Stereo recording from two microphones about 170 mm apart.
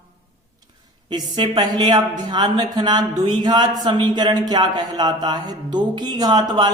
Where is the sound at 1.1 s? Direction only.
30° right (ahead or behind).